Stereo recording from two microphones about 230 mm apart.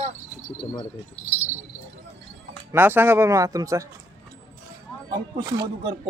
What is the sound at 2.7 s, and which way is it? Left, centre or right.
Speech, centre.